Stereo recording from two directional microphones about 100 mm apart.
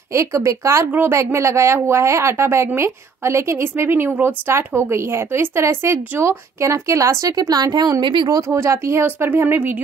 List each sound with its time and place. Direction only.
0.1 s a woman's voice: 30° right (ahead or behind); by 8.4 s 50° right (ahead or behind)
8.4 s a woman's voice: 30° right (ahead or behind)